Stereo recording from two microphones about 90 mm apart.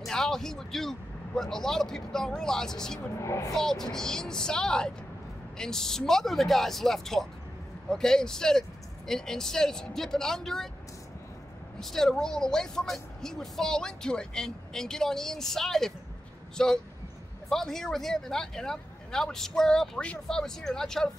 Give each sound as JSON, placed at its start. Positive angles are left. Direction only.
{"t": 0.0, "sound": "speech", "side_deg": 5}
{"t": 3.2, "sound": "speech", "side_deg": 35}
{"t": 3.5, "sound": "speech", "side_deg": 5}
{"t": 11.8, "sound": "speech", "side_deg": 5}